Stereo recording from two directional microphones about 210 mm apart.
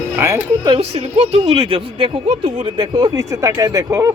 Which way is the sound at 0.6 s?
25° right (ahead or behind).